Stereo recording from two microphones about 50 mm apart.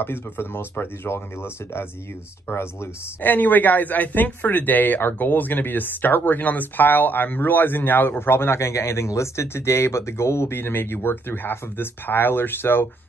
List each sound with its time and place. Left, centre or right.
0.0 s speech: left
3.2 s speech: left